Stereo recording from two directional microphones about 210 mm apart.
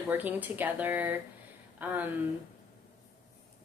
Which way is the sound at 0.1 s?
10° right (ahead or behind).